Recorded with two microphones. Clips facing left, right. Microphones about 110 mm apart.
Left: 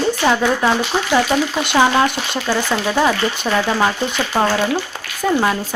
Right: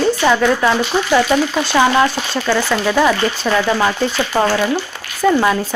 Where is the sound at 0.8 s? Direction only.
5° left (ahead or behind).